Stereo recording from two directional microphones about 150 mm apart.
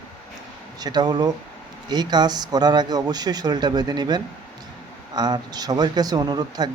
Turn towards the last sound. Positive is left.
turn(degrees=-25)  # may be behind; listen again after turning